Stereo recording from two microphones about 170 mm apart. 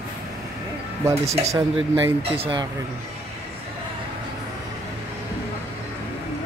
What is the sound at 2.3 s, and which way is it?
Speech, 30° right (ahead or behind).